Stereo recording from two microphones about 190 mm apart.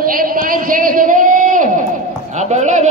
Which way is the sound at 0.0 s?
50° right (ahead or behind).